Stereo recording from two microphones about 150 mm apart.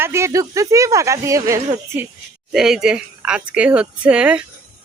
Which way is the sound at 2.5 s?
5° right (ahead or behind).